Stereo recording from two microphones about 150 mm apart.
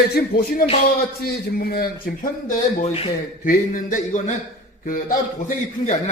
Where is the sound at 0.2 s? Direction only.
90° left.